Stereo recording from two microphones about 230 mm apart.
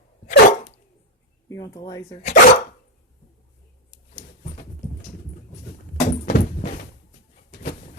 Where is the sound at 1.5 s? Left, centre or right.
Centre.